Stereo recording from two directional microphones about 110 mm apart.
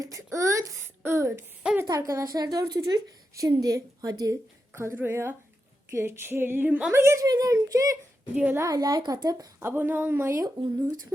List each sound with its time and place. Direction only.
0.0 s a woman's voice: 30° right (ahead or behind)
4.7 s a woman's voice: 20° right (ahead or behind); by 9.5 s 40° right (ahead or behind)
9.6 s speech: 20° right (ahead or behind)
10.4 s a woman's voice: 35° right (ahead or behind)